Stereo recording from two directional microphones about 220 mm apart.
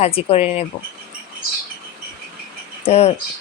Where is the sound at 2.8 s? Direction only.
30° left (ahead or behind).